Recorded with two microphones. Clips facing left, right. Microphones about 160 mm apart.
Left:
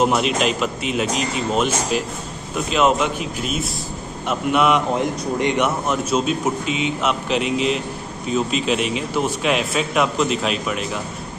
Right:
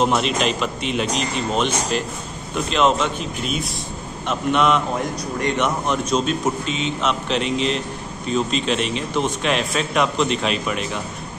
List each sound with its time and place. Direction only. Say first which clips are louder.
0.0 s a man's voice: left 1 dB; 5° left (ahead or behind)